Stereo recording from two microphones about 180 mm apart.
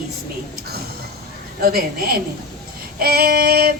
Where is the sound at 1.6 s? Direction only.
60° right (ahead or behind).